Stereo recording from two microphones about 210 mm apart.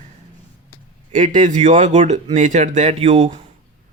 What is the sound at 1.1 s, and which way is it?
Speech, 35° right (ahead or behind).